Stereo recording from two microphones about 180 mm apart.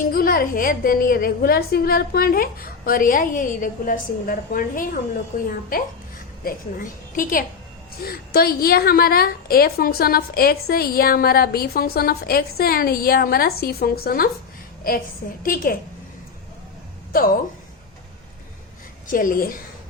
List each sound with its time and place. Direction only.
0.0 s a woman's voice: 55° left (ahead or behind)
15.4 s a woman's voice: 50° left (ahead or behind)
19.0 s a woman's voice: 50° left (ahead or behind)